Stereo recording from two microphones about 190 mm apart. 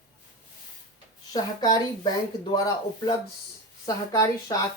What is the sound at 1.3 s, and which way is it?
Speech, 20° left (ahead or behind).